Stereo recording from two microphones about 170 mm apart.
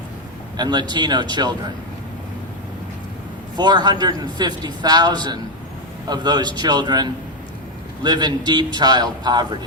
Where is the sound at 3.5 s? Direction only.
25° right (ahead or behind).